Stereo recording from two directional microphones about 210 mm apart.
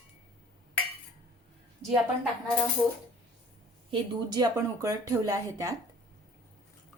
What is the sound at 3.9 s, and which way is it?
A woman's voice, 20° right (ahead or behind).